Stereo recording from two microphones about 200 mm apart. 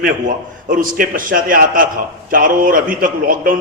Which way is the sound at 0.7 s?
45° right (ahead or behind).